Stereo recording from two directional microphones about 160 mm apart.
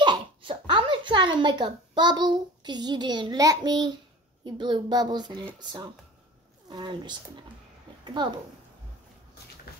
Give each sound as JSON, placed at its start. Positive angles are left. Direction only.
{"t": 0.0, "sound": "a child's voice", "side_deg": -30}